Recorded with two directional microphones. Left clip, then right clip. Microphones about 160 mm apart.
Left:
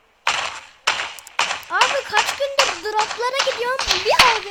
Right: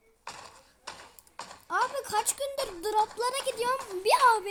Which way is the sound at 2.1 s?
5° right (ahead or behind).